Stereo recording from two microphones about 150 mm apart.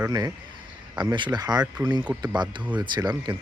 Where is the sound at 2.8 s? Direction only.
30° right (ahead or behind).